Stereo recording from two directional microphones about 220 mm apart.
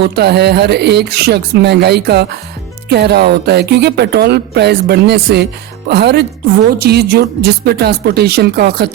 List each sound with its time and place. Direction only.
0.0 s speech: 50° right (ahead or behind)